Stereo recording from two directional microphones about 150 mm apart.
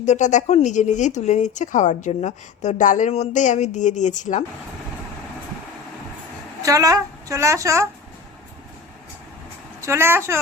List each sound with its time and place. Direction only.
0.0 s speech: 50° left (ahead or behind)
6.6 s a woman's voice: 20° right (ahead or behind)
9.8 s speech: 15° right (ahead or behind)